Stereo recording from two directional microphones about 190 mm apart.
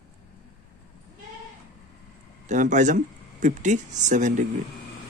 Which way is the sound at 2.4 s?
40° right (ahead or behind).